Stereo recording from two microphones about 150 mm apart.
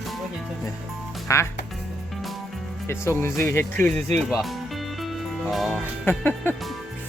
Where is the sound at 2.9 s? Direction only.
15° left (ahead or behind).